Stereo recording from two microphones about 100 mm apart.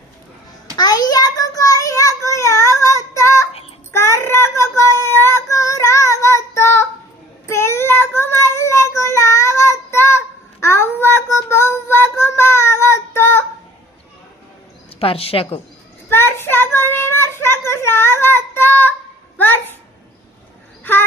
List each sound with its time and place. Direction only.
0.8 s child singing: 40° left (ahead or behind); by 13.4 s 25° left (ahead or behind)
14.9 s speech: 70° left (ahead or behind)
16.0 s child singing: 25° left (ahead or behind)
19.4 s a sound: 20° left (ahead or behind)